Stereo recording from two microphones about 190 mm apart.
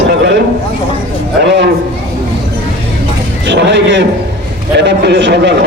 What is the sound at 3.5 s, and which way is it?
A man's voice, 65° right (ahead or behind).